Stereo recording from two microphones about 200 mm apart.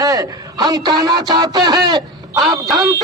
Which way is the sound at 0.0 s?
20° right (ahead or behind).